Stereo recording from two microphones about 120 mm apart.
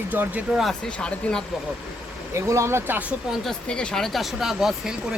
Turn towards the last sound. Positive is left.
turn(degrees=0)  # may be behind; listen again after turning